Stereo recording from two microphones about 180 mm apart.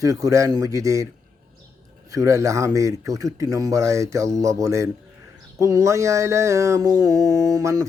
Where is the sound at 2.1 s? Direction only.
20° right (ahead or behind).